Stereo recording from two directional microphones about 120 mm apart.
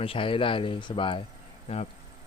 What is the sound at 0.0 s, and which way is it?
Speech, 50° left (ahead or behind).